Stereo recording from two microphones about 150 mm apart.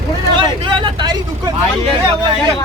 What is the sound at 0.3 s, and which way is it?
Vehicle, 35° right (ahead or behind).